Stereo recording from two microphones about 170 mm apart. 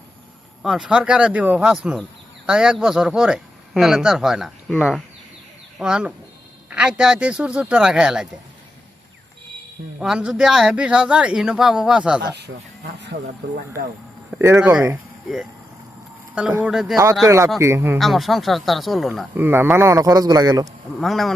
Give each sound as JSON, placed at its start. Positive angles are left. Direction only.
{"t": 0.6, "sound": "speech", "side_deg": -5}
{"t": 10.0, "sound": "speech", "side_deg": -5}
{"t": 12.2, "sound": "speech", "side_deg": -85}
{"t": 14.3, "sound": "speech", "side_deg": -10}
{"t": 16.3, "sound": "speech", "side_deg": -5}
{"t": 17.2, "sound": "speech", "side_deg": -15}
{"t": 17.9, "sound": "speech", "side_deg": 0}
{"t": 19.4, "sound": "speech", "side_deg": -10}
{"t": 21.0, "sound": "speech", "side_deg": 0}